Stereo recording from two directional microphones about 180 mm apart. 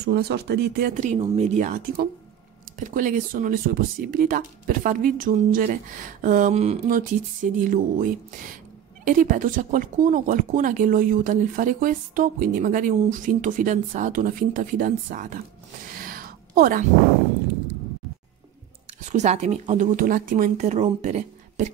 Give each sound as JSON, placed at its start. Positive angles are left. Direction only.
{"t": 0.0, "sound": "speech", "side_deg": -60}
{"t": 2.8, "sound": "speech", "side_deg": -50}
{"t": 16.0, "sound": "a sound", "side_deg": -50}
{"t": 19.0, "sound": "speech", "side_deg": -40}